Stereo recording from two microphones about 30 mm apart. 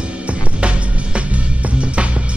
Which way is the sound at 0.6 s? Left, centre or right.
Right.